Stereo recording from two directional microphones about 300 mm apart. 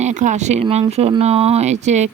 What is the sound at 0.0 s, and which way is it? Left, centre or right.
Speech, right.